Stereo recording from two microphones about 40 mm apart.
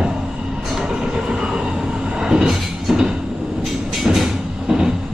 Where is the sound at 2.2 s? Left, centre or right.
Centre.